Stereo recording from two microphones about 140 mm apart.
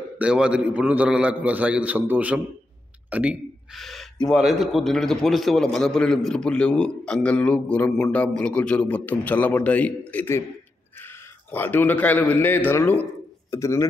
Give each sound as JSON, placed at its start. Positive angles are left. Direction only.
{"t": 0.2, "sound": "a man's voice", "side_deg": -5}